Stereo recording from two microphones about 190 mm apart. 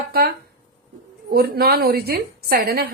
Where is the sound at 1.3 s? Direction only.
55° right (ahead or behind).